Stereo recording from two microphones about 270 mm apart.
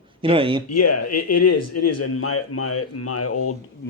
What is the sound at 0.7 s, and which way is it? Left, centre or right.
Speech, left.